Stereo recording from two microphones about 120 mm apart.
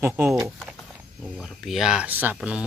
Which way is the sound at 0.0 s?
15° right (ahead or behind).